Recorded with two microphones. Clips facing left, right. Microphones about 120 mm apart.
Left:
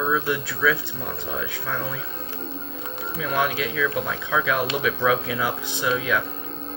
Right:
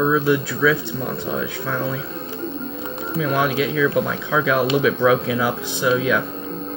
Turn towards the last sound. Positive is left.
turn(degrees=-5)  # may be behind; listen again after turning